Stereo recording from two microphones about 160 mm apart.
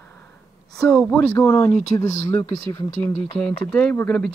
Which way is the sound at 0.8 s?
5° left (ahead or behind).